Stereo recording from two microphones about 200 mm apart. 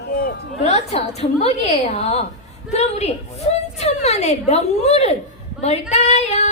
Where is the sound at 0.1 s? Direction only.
45° left (ahead or behind).